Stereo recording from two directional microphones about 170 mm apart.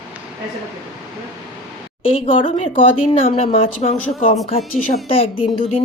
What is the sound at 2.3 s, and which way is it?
Speech, 35° left (ahead or behind).